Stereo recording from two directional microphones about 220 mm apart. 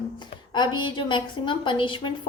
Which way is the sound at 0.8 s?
20° left (ahead or behind).